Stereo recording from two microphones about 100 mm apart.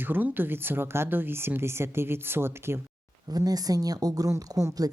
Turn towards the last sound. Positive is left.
turn(degrees=-35)  # may be behind; listen again after turning